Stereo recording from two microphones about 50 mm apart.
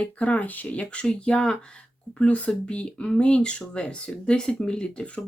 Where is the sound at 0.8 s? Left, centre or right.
Centre.